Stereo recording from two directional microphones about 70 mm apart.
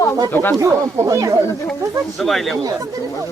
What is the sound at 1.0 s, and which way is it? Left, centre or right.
Speech, right.